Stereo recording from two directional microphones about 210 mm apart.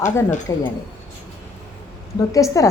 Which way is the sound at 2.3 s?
15° left (ahead or behind).